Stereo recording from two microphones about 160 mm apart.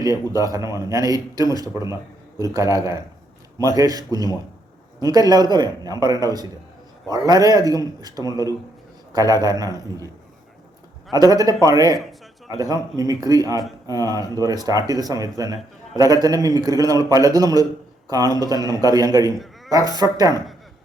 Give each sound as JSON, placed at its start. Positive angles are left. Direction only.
{"t": 0.0, "sound": "speech", "side_deg": -20}
{"t": 11.1, "sound": "speech", "side_deg": -25}